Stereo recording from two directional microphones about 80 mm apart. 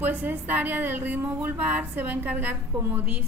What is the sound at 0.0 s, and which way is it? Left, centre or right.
A woman's voice, right.